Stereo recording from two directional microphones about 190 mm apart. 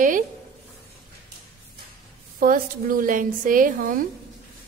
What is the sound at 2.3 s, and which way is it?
A woman's voice, 50° right (ahead or behind).